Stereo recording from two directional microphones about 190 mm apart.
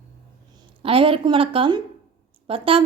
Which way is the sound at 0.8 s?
30° right (ahead or behind).